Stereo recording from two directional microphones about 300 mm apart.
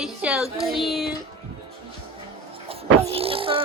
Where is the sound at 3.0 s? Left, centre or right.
Centre.